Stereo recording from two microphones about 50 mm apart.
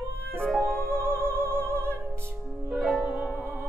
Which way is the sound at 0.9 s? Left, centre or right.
Right.